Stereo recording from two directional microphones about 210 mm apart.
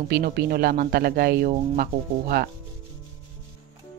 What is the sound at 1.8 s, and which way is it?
Speech, 45° right (ahead or behind).